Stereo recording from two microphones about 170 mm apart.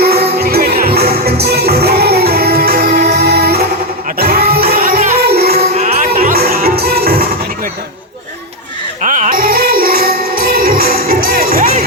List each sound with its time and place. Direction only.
0.0 s music: 65° right (ahead or behind)
5.2 s music: 65° right (ahead or behind)
5.7 s music: 45° right (ahead or behind)
6.1 s music: 60° right (ahead or behind)
9.0 s music: 50° right (ahead or behind)